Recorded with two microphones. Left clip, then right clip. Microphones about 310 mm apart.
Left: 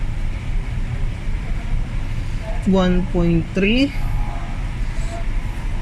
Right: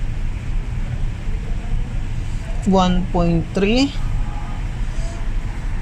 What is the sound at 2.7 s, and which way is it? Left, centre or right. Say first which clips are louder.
Speech: right 2 dB; right.